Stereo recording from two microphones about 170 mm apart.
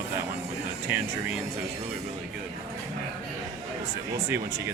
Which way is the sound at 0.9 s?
10° right (ahead or behind).